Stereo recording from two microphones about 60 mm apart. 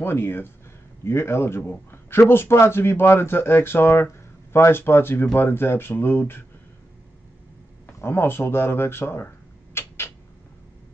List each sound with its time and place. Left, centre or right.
0.0 s speech: left
8.0 s speech: left
9.8 s cat: left